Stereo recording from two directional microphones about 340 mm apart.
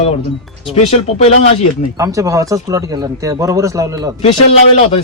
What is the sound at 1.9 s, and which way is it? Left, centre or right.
Speech, centre.